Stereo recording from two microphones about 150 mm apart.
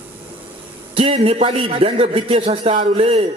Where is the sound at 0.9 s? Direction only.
40° right (ahead or behind).